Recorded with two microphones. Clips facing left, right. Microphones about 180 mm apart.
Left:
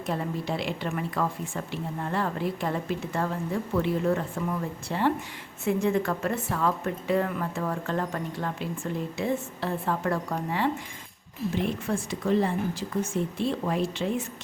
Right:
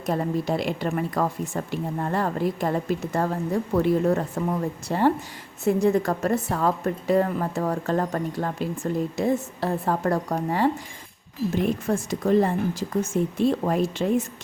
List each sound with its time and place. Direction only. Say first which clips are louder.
0.0 s a woman's voice: right 5 dB; 40° right (ahead or behind)